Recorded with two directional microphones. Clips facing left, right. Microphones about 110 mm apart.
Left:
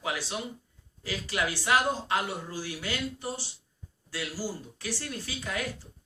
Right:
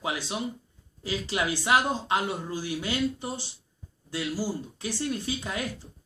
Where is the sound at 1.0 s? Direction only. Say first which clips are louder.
Right 2 dB; 20° right (ahead or behind).